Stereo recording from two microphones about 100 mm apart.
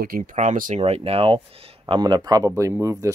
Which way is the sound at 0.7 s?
90° right.